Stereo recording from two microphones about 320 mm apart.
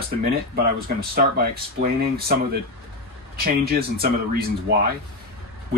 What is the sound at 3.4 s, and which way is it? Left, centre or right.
Speech, right.